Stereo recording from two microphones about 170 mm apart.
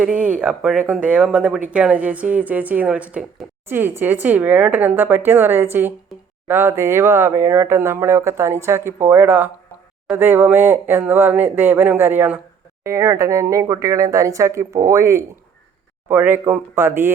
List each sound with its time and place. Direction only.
0.0 s speech: 10° right (ahead or behind)